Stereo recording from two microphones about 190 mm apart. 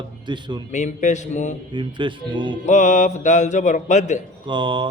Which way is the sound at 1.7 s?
25° right (ahead or behind).